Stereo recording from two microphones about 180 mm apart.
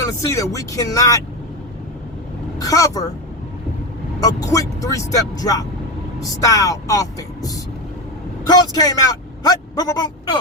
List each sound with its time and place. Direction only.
0.0 s speech: 15° left (ahead or behind)
2.6 s speech: 20° left (ahead or behind)
4.2 s speech: 20° left (ahead or behind)